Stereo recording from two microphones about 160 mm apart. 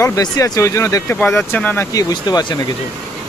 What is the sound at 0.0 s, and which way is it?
Speech, 20° left (ahead or behind).